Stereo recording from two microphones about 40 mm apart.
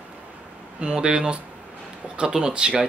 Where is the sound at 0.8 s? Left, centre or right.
Centre.